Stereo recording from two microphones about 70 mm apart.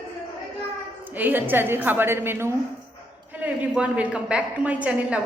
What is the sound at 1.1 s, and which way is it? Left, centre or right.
A woman's voice, right.